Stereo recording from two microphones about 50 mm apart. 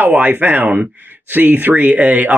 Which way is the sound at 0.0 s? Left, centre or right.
Right.